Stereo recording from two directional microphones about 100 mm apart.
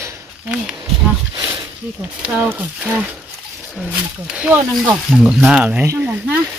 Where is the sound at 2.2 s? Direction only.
15° right (ahead or behind).